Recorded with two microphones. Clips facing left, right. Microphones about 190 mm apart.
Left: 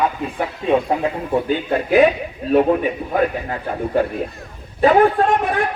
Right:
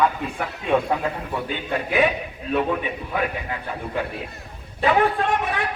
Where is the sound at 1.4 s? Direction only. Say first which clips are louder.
Left 7 dB; 35° left (ahead or behind).